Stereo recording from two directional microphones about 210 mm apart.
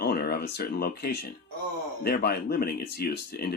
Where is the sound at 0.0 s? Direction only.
50° left (ahead or behind).